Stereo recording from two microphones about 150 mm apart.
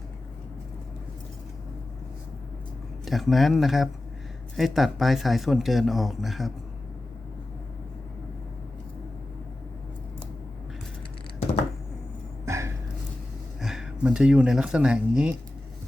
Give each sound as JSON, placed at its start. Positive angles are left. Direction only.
{"t": 3.0, "sound": "speech", "side_deg": 0}
{"t": 12.5, "sound": "a sound", "side_deg": -20}
{"t": 13.6, "sound": "speech", "side_deg": -5}